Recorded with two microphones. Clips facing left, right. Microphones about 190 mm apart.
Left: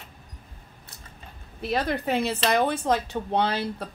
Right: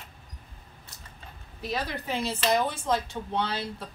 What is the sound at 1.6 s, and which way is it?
Speech, 55° left (ahead or behind).